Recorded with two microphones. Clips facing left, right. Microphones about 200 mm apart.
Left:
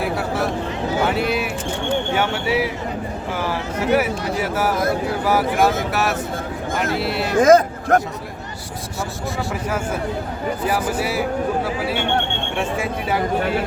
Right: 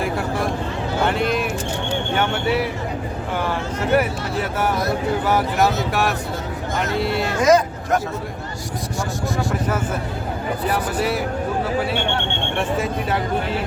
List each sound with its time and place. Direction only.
0.0 s speech: 5° left (ahead or behind)
7.4 s speech: 50° left (ahead or behind)
9.6 s speech: 10° left (ahead or behind)
12.5 s speech: 10° left (ahead or behind)